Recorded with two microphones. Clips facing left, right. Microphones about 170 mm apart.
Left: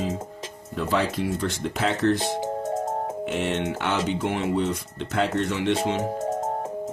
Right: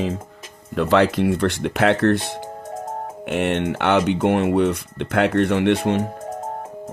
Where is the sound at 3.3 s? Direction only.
60° right (ahead or behind).